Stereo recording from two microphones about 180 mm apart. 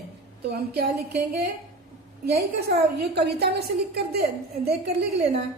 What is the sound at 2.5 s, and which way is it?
A woman's voice, 60° right (ahead or behind).